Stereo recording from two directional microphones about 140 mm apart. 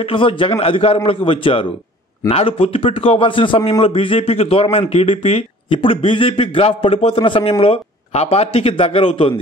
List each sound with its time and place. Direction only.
0.1 s a man's voice: 40° left (ahead or behind)